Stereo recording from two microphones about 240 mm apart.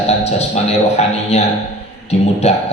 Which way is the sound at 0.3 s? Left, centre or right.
Left.